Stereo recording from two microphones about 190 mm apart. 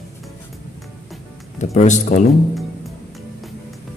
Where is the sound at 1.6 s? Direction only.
40° left (ahead or behind).